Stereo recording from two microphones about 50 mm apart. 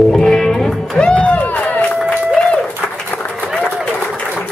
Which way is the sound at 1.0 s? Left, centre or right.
Left.